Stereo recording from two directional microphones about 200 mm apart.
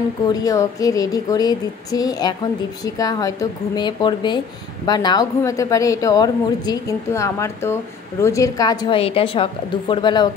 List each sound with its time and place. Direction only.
0.3 s a woman's voice: 20° left (ahead or behind)